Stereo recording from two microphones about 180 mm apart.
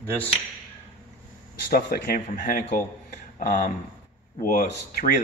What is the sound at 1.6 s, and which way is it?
Speech, 50° left (ahead or behind).